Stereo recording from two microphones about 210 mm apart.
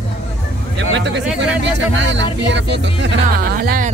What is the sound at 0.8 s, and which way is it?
Speech, 60° right (ahead or behind).